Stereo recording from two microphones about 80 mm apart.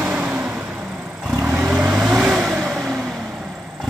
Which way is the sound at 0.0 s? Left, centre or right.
Centre.